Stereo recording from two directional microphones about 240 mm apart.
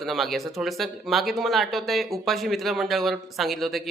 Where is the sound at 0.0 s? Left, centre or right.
Centre.